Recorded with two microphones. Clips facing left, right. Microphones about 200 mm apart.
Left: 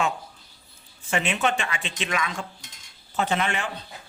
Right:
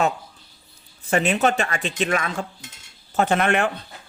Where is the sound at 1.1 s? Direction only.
40° right (ahead or behind); by 3.7 s 55° right (ahead or behind).